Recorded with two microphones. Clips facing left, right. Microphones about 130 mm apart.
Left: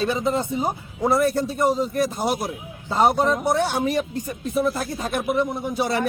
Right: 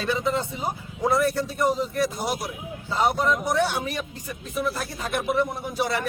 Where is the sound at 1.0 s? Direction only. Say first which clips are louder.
Left 2 dB; 15° left (ahead or behind).